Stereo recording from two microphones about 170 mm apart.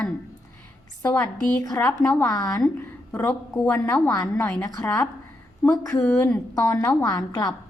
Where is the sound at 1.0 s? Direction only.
10° left (ahead or behind).